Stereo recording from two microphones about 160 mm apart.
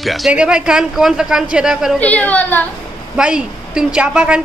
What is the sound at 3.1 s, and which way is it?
Speech, 5° right (ahead or behind).